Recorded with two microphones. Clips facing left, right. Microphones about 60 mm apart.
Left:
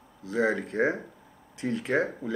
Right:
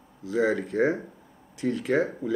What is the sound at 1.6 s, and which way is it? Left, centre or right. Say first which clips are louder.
Speech: right 2 dB; centre.